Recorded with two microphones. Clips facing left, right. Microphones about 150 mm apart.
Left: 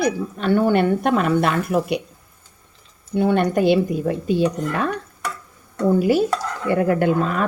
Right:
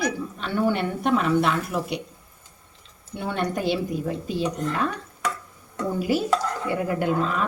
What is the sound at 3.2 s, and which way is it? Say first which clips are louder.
A woman's voice: left 9 dB; 60° left (ahead or behind).